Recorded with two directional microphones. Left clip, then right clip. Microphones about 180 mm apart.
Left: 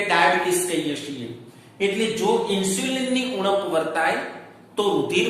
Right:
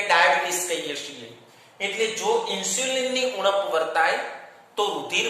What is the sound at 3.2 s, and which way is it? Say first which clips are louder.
A man's voice: even; 25° right (ahead or behind).